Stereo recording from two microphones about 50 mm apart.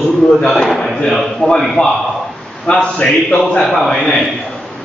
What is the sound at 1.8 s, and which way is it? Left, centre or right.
Speech, centre.